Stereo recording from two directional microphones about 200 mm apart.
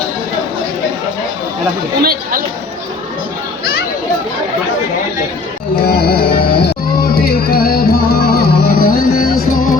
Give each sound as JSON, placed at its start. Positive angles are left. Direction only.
{"t": 2.0, "sound": "speech", "side_deg": -50}
{"t": 5.7, "sound": "music", "side_deg": 50}